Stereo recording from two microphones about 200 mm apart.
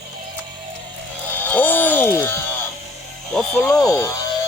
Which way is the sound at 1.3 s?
10° left (ahead or behind).